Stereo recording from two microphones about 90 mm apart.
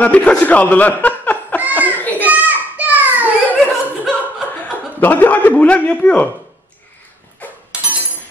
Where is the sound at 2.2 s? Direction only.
20° right (ahead or behind).